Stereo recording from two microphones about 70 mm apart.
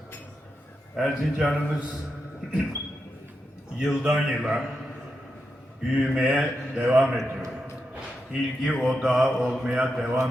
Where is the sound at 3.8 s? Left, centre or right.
Centre.